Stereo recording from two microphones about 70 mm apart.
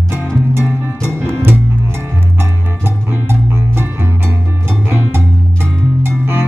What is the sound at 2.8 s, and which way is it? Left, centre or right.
Music, right.